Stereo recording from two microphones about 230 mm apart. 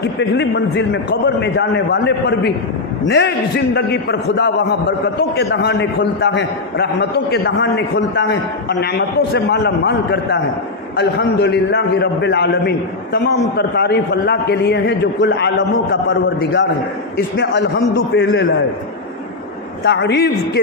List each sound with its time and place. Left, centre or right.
0.0 s a man's voice: left
19.8 s a man's voice: left